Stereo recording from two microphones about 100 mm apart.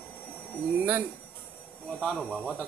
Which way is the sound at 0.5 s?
20° right (ahead or behind).